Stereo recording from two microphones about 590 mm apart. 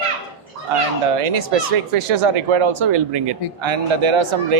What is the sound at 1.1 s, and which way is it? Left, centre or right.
Speech, right.